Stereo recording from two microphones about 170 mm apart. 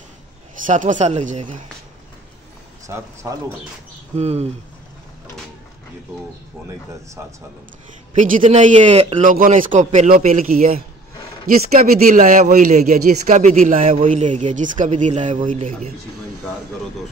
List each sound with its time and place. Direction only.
0.7 s speech: 50° right (ahead or behind)
2.9 s speech: 15° right (ahead or behind)
4.2 s speech: 40° right (ahead or behind)
7.2 s speech: 15° right (ahead or behind)
8.1 s speech: 45° right (ahead or behind)
11.6 s speech: 45° right (ahead or behind)